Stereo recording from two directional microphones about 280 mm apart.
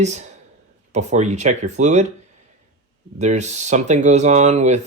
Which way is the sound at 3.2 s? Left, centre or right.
Right.